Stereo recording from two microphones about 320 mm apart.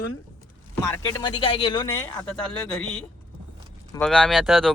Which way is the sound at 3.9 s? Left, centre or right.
Centre.